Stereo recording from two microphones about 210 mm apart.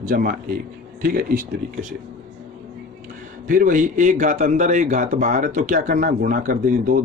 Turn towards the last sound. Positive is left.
turn(degrees=-40)  # may be behind; listen again after turning